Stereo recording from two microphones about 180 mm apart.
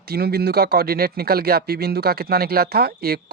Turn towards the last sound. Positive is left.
turn(degrees=-60)  # may be behind; listen again after turning